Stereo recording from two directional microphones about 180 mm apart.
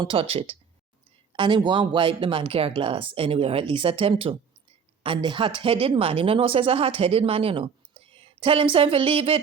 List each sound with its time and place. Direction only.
0.0 s speech: 30° right (ahead or behind)